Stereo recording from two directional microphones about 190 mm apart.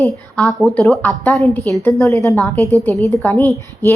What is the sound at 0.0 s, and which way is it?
A woman's voice, 5° left (ahead or behind).